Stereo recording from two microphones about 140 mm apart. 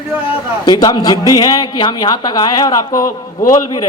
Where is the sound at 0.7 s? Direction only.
30° left (ahead or behind).